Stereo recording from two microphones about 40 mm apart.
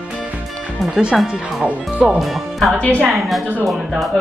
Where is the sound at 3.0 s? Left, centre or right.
Centre.